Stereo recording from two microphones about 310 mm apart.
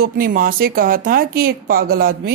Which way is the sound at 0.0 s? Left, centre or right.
Right.